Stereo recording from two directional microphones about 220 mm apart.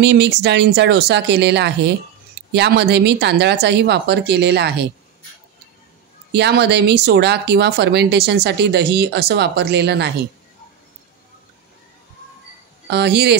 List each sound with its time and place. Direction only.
0.0 s speech: 50° right (ahead or behind)
6.3 s speech: 50° right (ahead or behind)
12.9 s speech: 50° right (ahead or behind)